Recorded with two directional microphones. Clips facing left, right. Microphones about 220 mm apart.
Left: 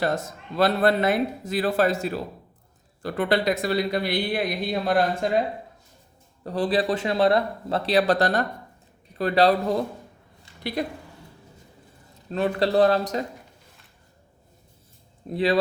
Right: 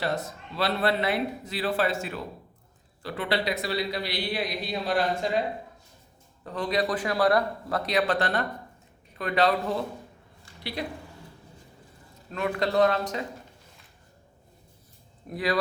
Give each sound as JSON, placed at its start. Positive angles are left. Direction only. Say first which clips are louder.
{"t": 0.0, "sound": "a man's voice", "louder": "left 4 dB", "side_deg": 45}
{"t": 3.0, "sound": "a man's voice", "louder": "left 5 dB", "side_deg": 50}
{"t": 6.4, "sound": "speech", "louder": "left 4 dB", "side_deg": 35}
{"t": 10.6, "sound": "speech", "louder": "left 6 dB", "side_deg": 45}
{"t": 12.3, "sound": "speech", "louder": "left 5 dB", "side_deg": 35}
{"t": 15.3, "sound": "speech", "louder": "left 5 dB", "side_deg": 25}